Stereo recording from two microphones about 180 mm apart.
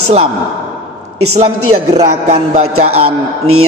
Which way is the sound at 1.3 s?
40° right (ahead or behind).